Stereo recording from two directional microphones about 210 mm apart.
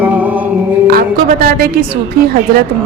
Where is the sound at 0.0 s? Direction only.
10° right (ahead or behind).